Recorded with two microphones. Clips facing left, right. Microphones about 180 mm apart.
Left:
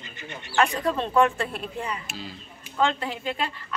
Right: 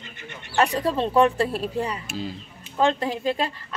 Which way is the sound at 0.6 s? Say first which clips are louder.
Right 2 dB; 35° right (ahead or behind).